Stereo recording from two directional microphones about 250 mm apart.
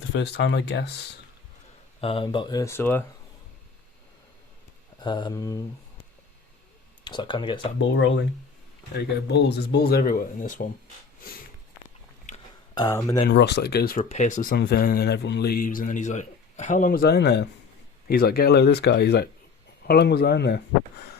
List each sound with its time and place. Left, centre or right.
0.1 s speech: left
2.0 s speech: left
4.9 s speech: centre
7.0 s speech: centre
7.8 s speech: left
12.3 s a sound: left
12.7 s speech: centre
13.2 s speech: left